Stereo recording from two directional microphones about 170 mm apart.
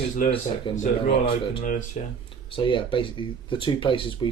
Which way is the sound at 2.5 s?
30° left (ahead or behind).